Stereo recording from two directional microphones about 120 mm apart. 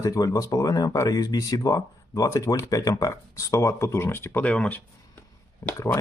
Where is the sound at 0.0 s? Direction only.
30° left (ahead or behind); by 4.8 s 10° left (ahead or behind).